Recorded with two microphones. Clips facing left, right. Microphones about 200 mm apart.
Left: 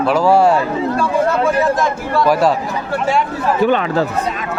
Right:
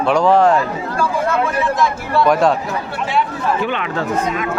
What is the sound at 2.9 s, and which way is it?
Speech, 45° left (ahead or behind).